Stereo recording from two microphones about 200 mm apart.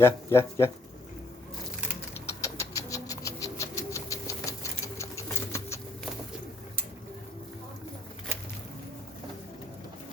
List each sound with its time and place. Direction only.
0.0 s speech: 15° left (ahead or behind)
2.1 s bird: 15° left (ahead or behind)